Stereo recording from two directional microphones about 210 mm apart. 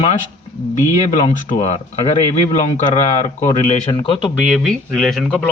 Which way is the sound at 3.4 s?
35° left (ahead or behind).